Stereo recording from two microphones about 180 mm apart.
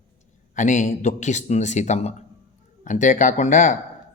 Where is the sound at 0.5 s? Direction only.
45° left (ahead or behind).